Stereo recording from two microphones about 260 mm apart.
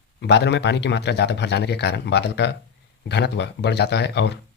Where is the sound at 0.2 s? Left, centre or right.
Left.